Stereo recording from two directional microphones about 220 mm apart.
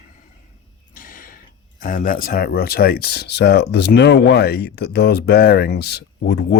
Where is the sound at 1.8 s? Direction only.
40° left (ahead or behind).